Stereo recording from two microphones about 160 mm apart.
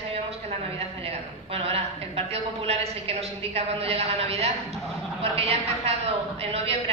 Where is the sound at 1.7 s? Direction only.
40° right (ahead or behind).